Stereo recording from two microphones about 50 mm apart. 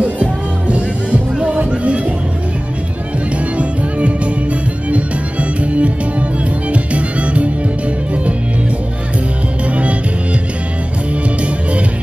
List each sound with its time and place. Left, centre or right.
0.0 s music: right
4.9 s music: right